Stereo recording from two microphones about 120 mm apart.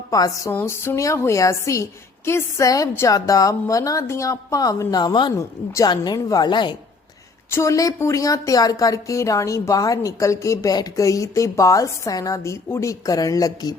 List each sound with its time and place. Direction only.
0.1 s a woman's voice: 30° left (ahead or behind)
5.4 s a woman's voice: 25° left (ahead or behind)
7.5 s a woman's voice: 25° left (ahead or behind)